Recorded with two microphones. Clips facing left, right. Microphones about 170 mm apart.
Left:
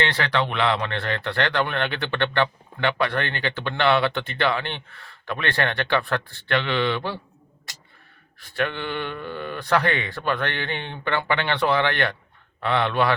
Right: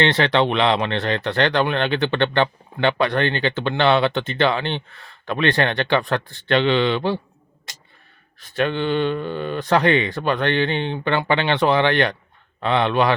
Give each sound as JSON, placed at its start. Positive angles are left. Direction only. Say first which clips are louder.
{"t": 0.0, "sound": "speech", "louder": "right 6 dB", "side_deg": -25}
{"t": 8.4, "sound": "speech", "louder": "right 5 dB", "side_deg": -20}